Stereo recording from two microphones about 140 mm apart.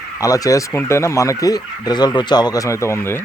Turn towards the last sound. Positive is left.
turn(degrees=20)  # may be behind; listen again after turning